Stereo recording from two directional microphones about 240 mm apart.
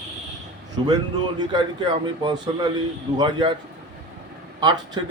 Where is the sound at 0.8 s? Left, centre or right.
Right.